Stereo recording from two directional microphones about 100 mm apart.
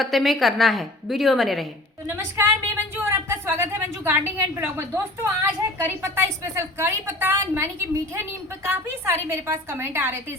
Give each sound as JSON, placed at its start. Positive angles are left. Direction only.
{"t": 0.0, "sound": "a woman's voice", "side_deg": 0}
{"t": 2.0, "sound": "a woman's voice", "side_deg": -20}